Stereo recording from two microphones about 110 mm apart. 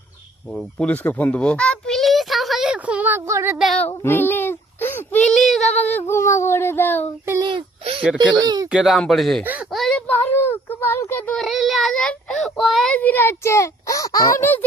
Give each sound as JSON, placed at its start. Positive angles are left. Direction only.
{"t": 0.5, "sound": "a child's voice", "side_deg": 10}
{"t": 4.0, "sound": "a sound", "side_deg": 20}
{"t": 5.2, "sound": "speech", "side_deg": 0}
{"t": 5.7, "sound": "child singing", "side_deg": 15}
{"t": 7.4, "sound": "a sound", "side_deg": -50}
{"t": 8.4, "sound": "speech", "side_deg": -35}
{"t": 8.7, "sound": "speech", "side_deg": -5}
{"t": 9.4, "sound": "speech", "side_deg": -15}
{"t": 9.7, "sound": "child singing", "side_deg": 0}
{"t": 10.1, "sound": "child singing", "side_deg": 20}
{"t": 11.4, "sound": "child singing", "side_deg": 0}
{"t": 13.0, "sound": "a child's voice", "side_deg": 15}